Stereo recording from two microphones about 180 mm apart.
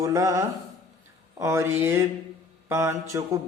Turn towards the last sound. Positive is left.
turn(degrees=-15)  # may be behind; listen again after turning